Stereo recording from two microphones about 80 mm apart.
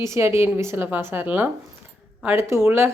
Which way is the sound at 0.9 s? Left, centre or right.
Right.